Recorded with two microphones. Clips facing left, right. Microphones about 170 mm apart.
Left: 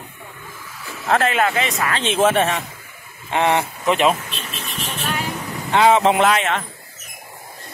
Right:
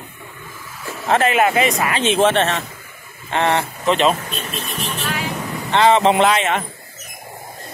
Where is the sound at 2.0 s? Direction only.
5° left (ahead or behind).